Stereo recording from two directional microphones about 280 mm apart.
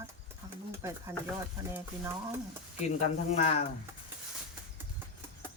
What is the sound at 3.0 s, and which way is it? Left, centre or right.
Speech, left.